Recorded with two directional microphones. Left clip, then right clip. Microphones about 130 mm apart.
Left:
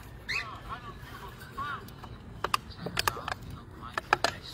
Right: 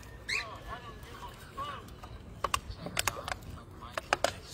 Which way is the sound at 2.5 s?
15° right (ahead or behind).